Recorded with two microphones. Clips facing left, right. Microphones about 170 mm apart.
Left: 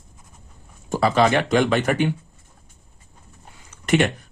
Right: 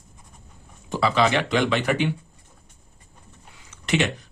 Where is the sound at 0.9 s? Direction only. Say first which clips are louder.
Left 3 dB; 45° left (ahead or behind).